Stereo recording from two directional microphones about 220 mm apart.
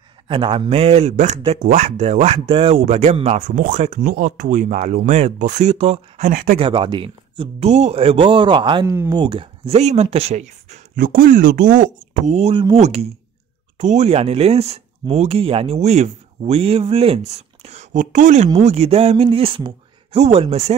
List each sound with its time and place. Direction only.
0.3 s speech: 25° right (ahead or behind); by 6.6 s 40° right (ahead or behind)
6.6 s speech: 20° right (ahead or behind)
8.9 s speech: 10° right (ahead or behind)
9.2 s speech: 20° right (ahead or behind)